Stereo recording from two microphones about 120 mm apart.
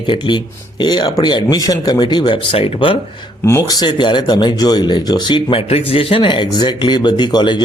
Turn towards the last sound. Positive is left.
turn(degrees=35)  # may be behind; listen again after turning